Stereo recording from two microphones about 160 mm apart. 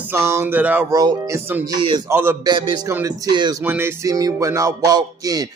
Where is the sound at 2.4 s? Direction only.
30° right (ahead or behind).